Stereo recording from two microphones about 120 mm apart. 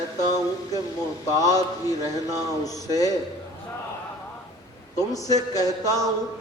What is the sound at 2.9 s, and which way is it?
Speech, 30° left (ahead or behind).